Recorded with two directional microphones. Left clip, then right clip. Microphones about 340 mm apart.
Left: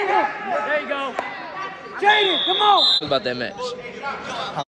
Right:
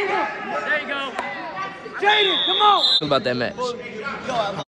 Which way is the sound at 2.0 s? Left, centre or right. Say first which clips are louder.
Left 1 dB; left.